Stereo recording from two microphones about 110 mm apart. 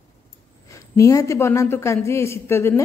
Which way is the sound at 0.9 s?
30° left (ahead or behind).